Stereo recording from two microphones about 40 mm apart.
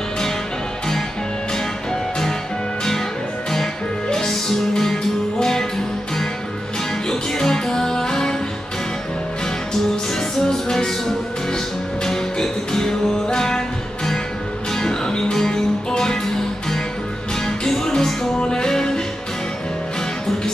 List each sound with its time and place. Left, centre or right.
4.1 s music: centre
7.1 s music: centre
10.4 s music: centre
14.8 s music: centre
17.5 s music: centre